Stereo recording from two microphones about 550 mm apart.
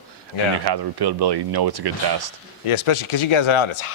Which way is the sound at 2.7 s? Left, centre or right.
Left.